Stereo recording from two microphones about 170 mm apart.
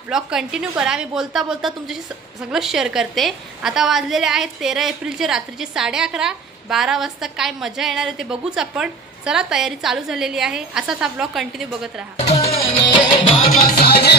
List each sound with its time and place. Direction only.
0.1 s a woman's voice: 5° right (ahead or behind)
12.3 s music: 40° left (ahead or behind)
13.8 s music: 70° left (ahead or behind)